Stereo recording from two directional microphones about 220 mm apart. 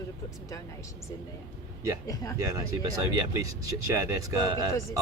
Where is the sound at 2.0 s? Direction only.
15° left (ahead or behind).